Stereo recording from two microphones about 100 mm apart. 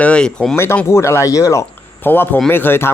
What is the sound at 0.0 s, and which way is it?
Speech, 10° left (ahead or behind).